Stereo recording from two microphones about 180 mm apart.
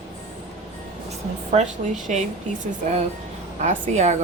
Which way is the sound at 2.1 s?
45° right (ahead or behind).